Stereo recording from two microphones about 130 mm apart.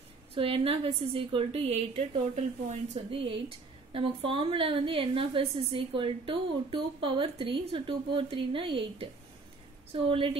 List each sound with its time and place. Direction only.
0.3 s a woman's voice: 45° right (ahead or behind)